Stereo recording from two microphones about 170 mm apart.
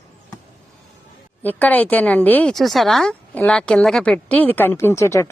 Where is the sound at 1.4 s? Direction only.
10° left (ahead or behind).